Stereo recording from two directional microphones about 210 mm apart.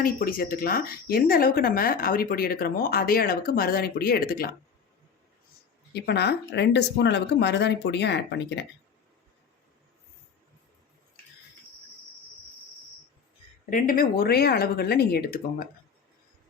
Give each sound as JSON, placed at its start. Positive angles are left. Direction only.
{"t": 0.0, "sound": "speech", "side_deg": 45}
{"t": 5.9, "sound": "speech", "side_deg": 50}
{"t": 13.7, "sound": "speech", "side_deg": 40}